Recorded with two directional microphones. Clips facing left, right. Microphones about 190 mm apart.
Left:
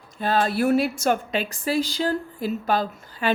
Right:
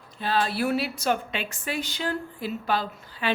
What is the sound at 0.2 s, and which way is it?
A woman's voice, 45° left (ahead or behind).